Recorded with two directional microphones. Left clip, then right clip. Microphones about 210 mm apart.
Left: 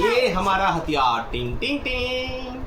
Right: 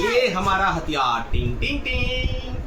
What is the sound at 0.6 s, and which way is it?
Speech, 15° right (ahead or behind).